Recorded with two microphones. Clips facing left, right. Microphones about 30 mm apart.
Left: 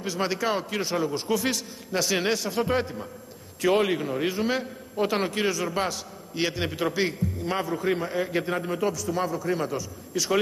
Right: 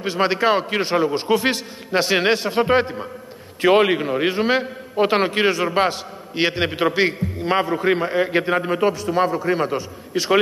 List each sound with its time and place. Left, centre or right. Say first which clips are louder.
0.0 s a man's voice: right 8 dB; right